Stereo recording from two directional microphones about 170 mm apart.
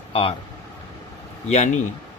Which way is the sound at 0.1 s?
35° left (ahead or behind).